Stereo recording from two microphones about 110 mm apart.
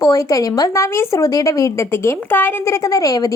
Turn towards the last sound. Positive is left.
turn(degrees=35)  # may be behind; listen again after turning